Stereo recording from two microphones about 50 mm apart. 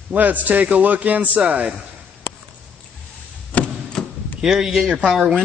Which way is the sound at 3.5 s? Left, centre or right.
Left.